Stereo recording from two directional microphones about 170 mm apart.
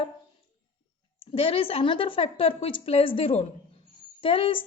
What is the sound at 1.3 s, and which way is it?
A woman's voice, 35° left (ahead or behind).